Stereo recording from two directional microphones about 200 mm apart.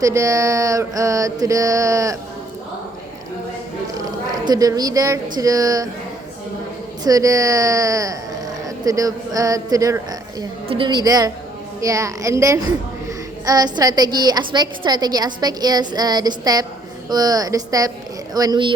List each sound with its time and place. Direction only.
0.0 s mantra: 15° right (ahead or behind)
4.4 s mantra: 20° right (ahead or behind)
7.0 s mantra: 15° right (ahead or behind)
10.7 s a woman's voice: 25° right (ahead or behind)
11.8 s mantra: 15° right (ahead or behind)
13.4 s a woman's voice: 20° right (ahead or behind)
17.1 s mantra: 20° right (ahead or behind)
18.3 s a woman's voice: 20° right (ahead or behind)